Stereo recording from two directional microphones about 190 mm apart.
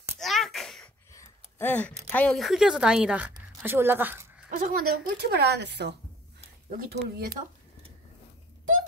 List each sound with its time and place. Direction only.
0.2 s a sound: centre (ahead or behind)
2.0 s speech: 5° left (ahead or behind); by 4.5 s 10° right (ahead or behind)
4.5 s speech: 45° right (ahead or behind)